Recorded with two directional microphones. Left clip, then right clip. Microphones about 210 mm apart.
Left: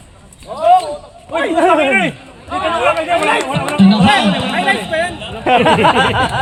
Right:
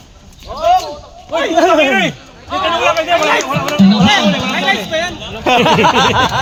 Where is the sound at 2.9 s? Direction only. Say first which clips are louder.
Right 2 dB; 25° right (ahead or behind).